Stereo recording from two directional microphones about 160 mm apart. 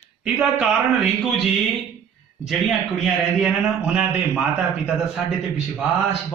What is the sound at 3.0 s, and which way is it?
A man's voice, 5° right (ahead or behind).